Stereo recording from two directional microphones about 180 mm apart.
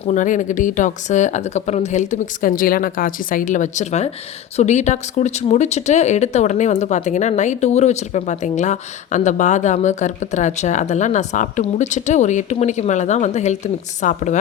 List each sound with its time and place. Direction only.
0.1 s speech: 45° left (ahead or behind)